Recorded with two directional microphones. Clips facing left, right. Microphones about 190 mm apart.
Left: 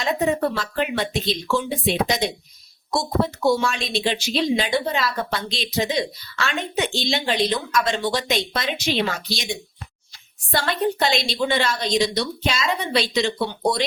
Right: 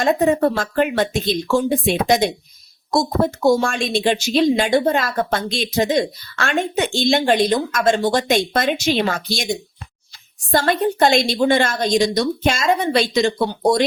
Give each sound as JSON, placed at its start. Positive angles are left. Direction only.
{"t": 0.0, "sound": "speech", "side_deg": -50}